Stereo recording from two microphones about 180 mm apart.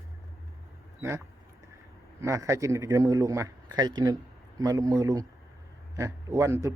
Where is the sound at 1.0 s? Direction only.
15° right (ahead or behind).